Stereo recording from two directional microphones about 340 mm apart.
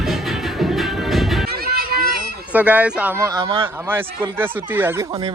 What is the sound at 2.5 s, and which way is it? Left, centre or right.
Speech, centre.